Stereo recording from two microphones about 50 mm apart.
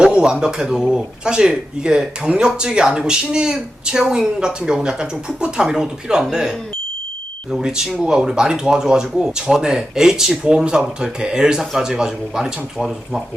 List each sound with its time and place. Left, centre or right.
0.0 s a man's voice: centre